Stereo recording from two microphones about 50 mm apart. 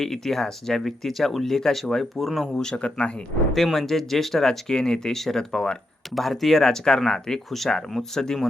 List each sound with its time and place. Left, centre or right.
0.0 s speech: centre
2.6 s speech: centre
3.5 s speech: centre
6.1 s speech: centre